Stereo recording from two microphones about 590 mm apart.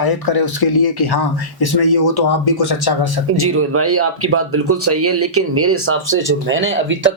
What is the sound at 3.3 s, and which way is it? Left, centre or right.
Speech, right.